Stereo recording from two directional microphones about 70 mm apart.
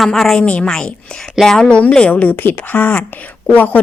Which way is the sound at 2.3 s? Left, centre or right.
Left.